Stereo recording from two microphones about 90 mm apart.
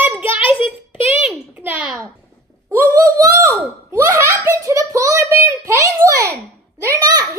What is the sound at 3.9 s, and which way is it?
Speech, 25° right (ahead or behind).